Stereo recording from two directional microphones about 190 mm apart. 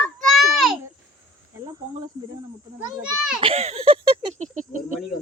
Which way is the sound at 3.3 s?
30° right (ahead or behind).